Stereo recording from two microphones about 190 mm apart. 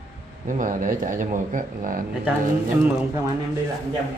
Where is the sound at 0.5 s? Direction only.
45° right (ahead or behind).